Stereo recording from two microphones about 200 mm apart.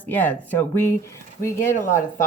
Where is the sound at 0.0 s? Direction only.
10° left (ahead or behind).